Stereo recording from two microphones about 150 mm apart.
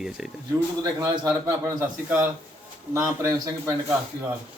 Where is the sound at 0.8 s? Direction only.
25° right (ahead or behind).